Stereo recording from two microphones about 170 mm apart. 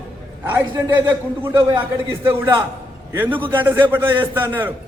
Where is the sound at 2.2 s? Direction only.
15° right (ahead or behind).